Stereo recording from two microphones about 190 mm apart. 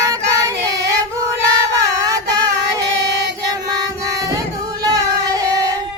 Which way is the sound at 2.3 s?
20° right (ahead or behind).